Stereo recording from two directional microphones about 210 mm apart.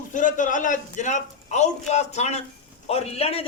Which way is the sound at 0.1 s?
35° left (ahead or behind).